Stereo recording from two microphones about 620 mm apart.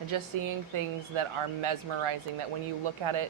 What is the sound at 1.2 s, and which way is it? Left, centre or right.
Speech, right.